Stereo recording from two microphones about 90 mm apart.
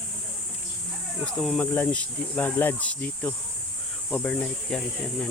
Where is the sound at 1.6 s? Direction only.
20° left (ahead or behind).